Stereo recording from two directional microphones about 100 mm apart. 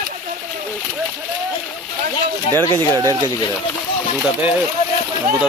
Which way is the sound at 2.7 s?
40° right (ahead or behind).